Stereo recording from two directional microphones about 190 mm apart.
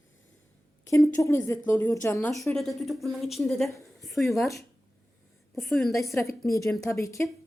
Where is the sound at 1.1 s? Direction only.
15° left (ahead or behind); by 4.5 s centre (ahead or behind).